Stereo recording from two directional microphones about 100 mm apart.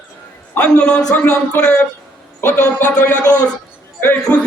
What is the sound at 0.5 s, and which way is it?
Speech, 15° left (ahead or behind).